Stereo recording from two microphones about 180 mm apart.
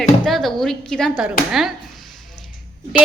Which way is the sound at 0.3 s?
Centre (ahead or behind).